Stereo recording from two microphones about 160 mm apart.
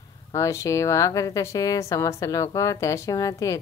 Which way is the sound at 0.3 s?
20° left (ahead or behind).